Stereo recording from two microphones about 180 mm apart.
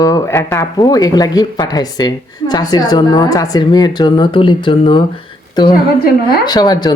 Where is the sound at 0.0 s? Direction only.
15° left (ahead or behind).